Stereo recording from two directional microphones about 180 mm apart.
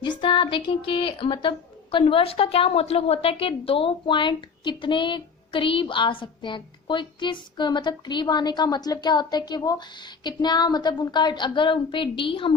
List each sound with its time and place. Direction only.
0.0 s a woman's voice: 25° left (ahead or behind)